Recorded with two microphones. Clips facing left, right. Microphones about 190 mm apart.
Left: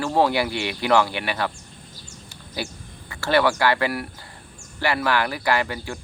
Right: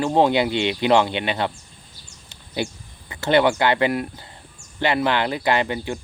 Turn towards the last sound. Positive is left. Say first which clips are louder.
# right 2 dB
turn(degrees=-20)  # may be behind; listen again after turning